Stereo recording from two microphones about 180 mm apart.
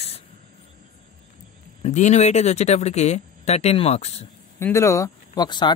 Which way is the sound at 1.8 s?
40° left (ahead or behind).